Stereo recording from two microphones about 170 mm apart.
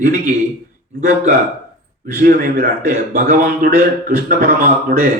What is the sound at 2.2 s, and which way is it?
A man's voice, 55° right (ahead or behind).